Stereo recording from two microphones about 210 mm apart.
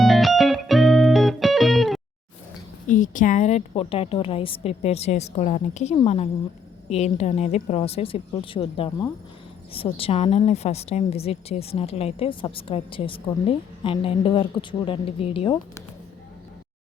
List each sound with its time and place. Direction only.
0.0 s music: centre (ahead or behind)
2.8 s a woman's voice: 35° left (ahead or behind); by 15.6 s 20° left (ahead or behind)